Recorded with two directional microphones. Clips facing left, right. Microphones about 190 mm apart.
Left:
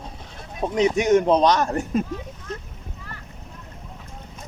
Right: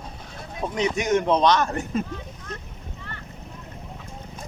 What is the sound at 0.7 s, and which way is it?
A man's voice, 40° left (ahead or behind).